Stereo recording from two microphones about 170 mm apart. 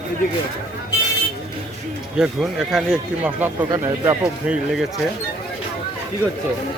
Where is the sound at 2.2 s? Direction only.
5° right (ahead or behind).